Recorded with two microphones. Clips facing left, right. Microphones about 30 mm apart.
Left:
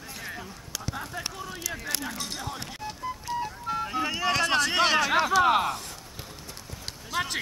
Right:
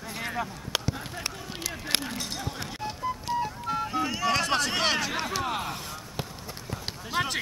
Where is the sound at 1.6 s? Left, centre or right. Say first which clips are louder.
Right 4 dB; right.